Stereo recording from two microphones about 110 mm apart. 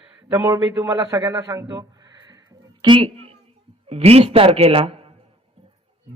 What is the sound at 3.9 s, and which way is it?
A man's voice, 65° right (ahead or behind).